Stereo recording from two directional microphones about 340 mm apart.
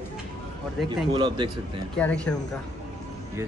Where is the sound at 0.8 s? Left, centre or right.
Centre.